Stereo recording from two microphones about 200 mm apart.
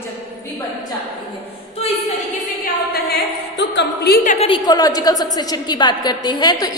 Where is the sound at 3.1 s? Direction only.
60° left (ahead or behind); by 4.5 s 40° left (ahead or behind).